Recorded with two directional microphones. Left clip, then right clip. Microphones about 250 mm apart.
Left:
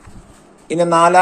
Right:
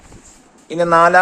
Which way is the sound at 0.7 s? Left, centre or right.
Centre.